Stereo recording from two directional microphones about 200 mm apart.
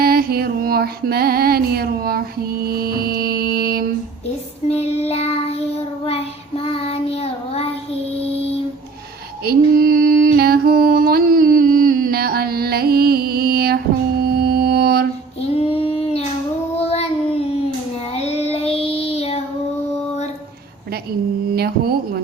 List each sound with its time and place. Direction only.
0.0 s music: 50° right (ahead or behind)
4.7 s child singing: 30° left (ahead or behind)
9.4 s mantra: 50° right (ahead or behind)
10.3 s music: 50° right (ahead or behind)
15.4 s child singing: 30° left (ahead or behind)
21.5 s a sound: 50° right (ahead or behind)